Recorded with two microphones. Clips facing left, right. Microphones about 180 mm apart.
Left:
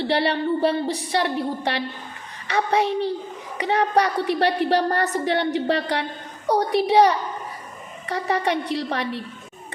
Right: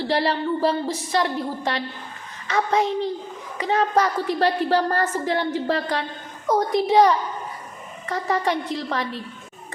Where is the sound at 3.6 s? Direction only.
70° left (ahead or behind).